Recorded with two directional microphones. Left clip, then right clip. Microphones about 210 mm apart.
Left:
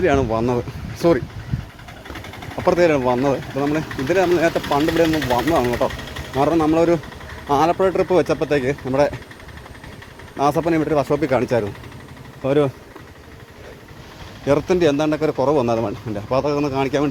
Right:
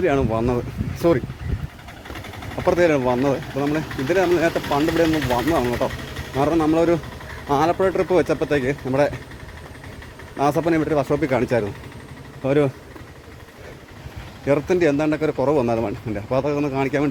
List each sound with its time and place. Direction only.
0.0 s speech: 5° left (ahead or behind)
2.6 s speech: 5° left (ahead or behind); by 4.1 s 25° left (ahead or behind)
4.1 s speech: 5° left (ahead or behind)
5.0 s speech: 55° left (ahead or behind)
5.3 s speech: 10° left (ahead or behind)
10.3 s speech: 5° right (ahead or behind)
14.4 s speech: centre (ahead or behind)